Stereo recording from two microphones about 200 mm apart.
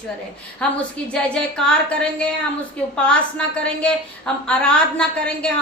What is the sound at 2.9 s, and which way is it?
A woman's voice, 5° left (ahead or behind).